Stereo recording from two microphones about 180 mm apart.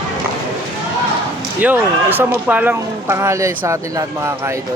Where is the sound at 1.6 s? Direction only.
10° right (ahead or behind).